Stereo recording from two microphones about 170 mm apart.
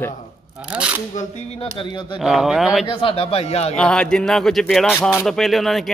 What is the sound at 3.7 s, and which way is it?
Speech, 5° left (ahead or behind).